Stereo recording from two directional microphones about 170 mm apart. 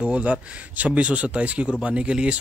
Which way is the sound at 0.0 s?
5° right (ahead or behind).